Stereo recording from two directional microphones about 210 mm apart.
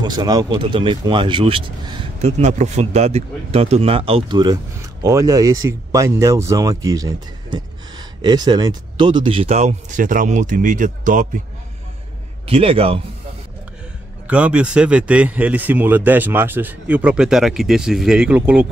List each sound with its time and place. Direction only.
0.0 s speech: 20° right (ahead or behind); by 11.4 s 40° right (ahead or behind)
12.4 s speech: 25° right (ahead or behind)
14.2 s speech: 5° right (ahead or behind)